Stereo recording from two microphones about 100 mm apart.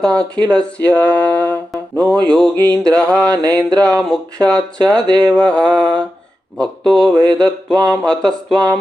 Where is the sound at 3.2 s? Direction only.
40° right (ahead or behind).